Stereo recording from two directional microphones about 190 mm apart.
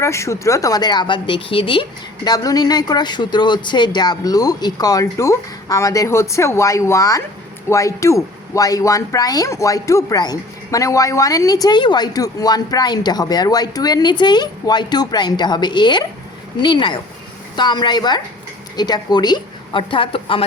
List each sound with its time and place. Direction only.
0.0 s speech: 15° left (ahead or behind)